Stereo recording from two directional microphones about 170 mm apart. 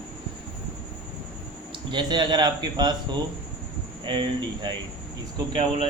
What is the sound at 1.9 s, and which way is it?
A man's voice, 25° right (ahead or behind).